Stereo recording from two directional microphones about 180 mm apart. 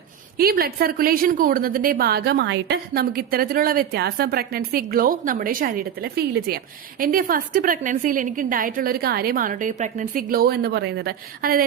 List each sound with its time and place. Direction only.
0.3 s a woman's voice: 55° right (ahead or behind)